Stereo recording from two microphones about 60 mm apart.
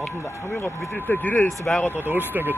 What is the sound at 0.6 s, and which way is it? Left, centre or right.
Speech, left.